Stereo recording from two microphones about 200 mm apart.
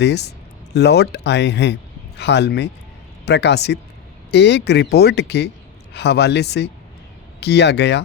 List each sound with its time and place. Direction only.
0.0 s speech: 55° left (ahead or behind)